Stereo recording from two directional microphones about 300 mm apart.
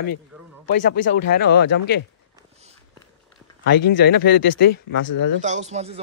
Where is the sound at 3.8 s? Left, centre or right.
Left.